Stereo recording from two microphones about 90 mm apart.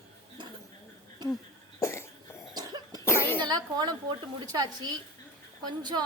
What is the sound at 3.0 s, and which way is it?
Cough, 25° left (ahead or behind).